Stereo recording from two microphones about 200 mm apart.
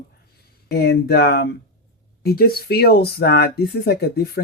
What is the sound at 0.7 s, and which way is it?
Speech, 55° left (ahead or behind).